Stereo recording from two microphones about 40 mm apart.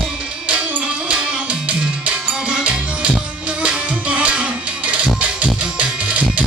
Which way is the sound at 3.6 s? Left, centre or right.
Right.